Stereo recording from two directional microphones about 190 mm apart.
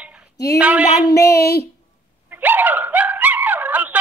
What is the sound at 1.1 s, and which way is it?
Speech, 55° left (ahead or behind).